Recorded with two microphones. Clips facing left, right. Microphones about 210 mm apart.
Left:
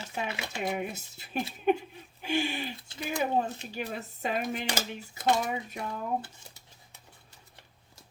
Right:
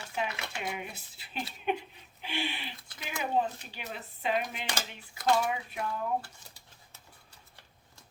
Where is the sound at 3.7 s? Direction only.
45° left (ahead or behind).